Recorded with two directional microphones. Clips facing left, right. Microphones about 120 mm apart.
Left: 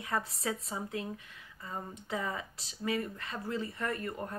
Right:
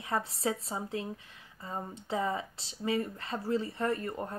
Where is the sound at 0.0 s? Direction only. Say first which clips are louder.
Right 3 dB; 25° right (ahead or behind).